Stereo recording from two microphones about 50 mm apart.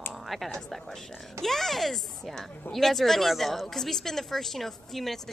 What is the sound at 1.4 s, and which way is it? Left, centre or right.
A woman's voice, centre.